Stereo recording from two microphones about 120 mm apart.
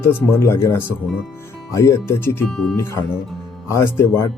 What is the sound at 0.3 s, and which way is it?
Speech, 20° left (ahead or behind).